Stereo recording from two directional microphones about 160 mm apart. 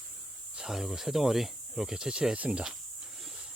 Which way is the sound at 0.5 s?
Centre (ahead or behind).